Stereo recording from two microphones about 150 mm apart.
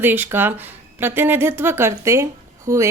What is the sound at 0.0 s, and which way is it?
A woman's voice, 15° right (ahead or behind).